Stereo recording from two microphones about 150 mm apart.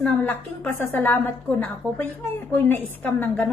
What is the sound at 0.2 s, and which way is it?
A woman's voice, 15° left (ahead or behind).